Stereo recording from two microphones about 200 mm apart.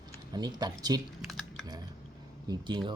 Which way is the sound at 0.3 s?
20° right (ahead or behind).